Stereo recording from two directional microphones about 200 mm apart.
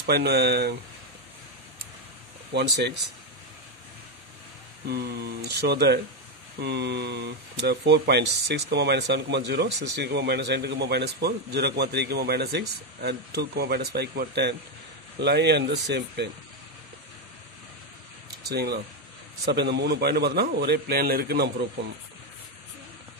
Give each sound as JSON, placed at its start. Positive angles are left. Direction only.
{"t": 0.0, "sound": "speech", "side_deg": -55}
{"t": 2.5, "sound": "speech", "side_deg": -55}
{"t": 4.8, "sound": "a man's voice", "side_deg": -55}
{"t": 18.5, "sound": "a man's voice", "side_deg": -55}